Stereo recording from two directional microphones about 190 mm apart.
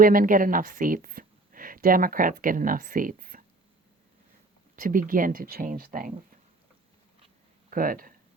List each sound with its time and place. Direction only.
0.0 s a woman's voice: 45° right (ahead or behind)
4.8 s speech: 45° right (ahead or behind)
7.7 s speech: 50° right (ahead or behind)